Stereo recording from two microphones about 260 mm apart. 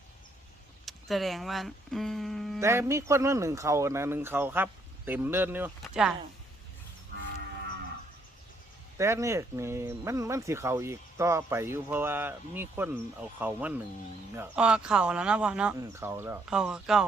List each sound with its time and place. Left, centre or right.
0.9 s speech: centre
2.6 s speech: centre
9.0 s speech: centre